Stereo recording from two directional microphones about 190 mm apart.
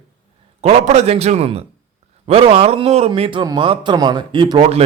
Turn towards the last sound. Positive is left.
turn(degrees=-25)  # may be behind; listen again after turning